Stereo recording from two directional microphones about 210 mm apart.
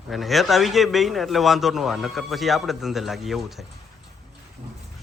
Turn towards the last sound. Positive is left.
turn(degrees=0)  # may be behind; listen again after turning